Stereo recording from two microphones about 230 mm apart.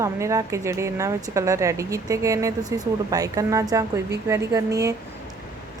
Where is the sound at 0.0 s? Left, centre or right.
Centre.